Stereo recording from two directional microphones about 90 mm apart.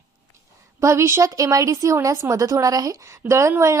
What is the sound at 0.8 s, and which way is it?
Speech, 35° right (ahead or behind).